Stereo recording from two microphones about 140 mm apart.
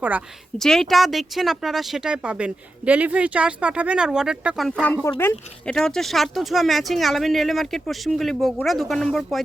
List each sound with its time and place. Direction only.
0.6 s speech: 5° left (ahead or behind)
5.6 s speech: 5° left (ahead or behind)